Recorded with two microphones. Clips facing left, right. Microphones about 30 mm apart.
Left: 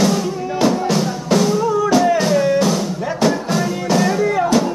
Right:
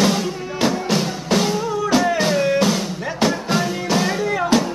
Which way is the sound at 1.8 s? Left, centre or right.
Centre.